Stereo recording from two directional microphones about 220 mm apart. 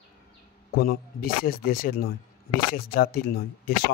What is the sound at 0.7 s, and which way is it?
Speech, 45° left (ahead or behind).